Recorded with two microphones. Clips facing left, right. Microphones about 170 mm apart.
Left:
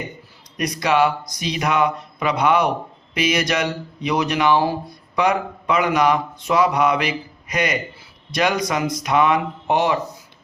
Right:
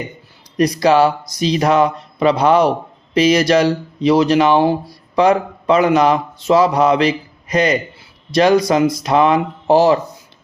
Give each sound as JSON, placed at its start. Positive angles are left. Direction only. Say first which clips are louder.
{"t": 0.5, "sound": "speech", "louder": "right 7 dB", "side_deg": -30}